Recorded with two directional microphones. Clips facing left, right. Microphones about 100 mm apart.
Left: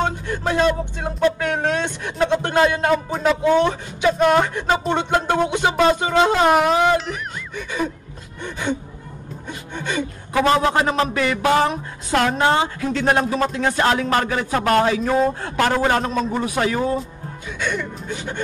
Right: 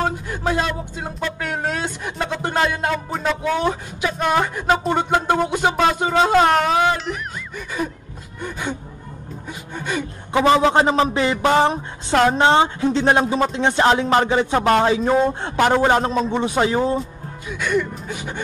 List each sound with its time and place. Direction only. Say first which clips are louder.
0.3 s speech: left 3 dB; 5° right (ahead or behind)
10.3 s a man's voice: right 2 dB; 20° right (ahead or behind)
17.0 s speech: right 1 dB; 5° right (ahead or behind)